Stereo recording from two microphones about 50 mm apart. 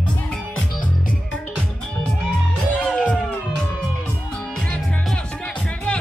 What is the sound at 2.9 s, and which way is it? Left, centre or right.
Music, left.